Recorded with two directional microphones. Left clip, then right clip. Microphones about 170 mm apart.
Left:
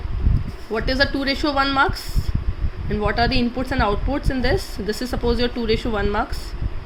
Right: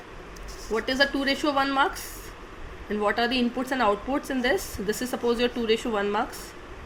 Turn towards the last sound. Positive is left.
turn(degrees=20)  # may be behind; listen again after turning